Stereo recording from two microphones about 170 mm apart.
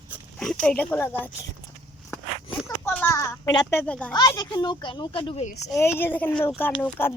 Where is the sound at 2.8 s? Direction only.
15° left (ahead or behind).